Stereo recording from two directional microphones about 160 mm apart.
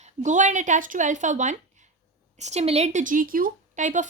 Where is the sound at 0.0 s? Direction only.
50° right (ahead or behind).